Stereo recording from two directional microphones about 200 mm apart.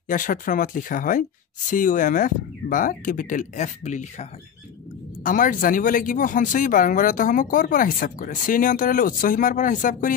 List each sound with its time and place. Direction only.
0.1 s speech: 45° left (ahead or behind)